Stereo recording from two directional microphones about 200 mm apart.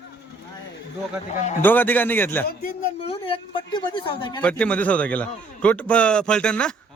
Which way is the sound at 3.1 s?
25° left (ahead or behind).